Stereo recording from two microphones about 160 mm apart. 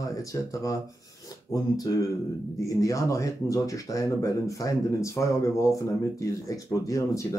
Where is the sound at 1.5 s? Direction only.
20° left (ahead or behind).